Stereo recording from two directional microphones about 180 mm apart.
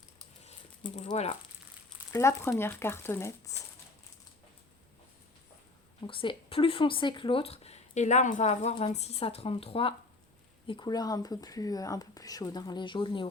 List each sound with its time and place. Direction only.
0.4 s a sound: 35° left (ahead or behind)
1.1 s speech: 35° left (ahead or behind)
2.1 s speech: 15° left (ahead or behind)
6.1 s speech: 30° left (ahead or behind)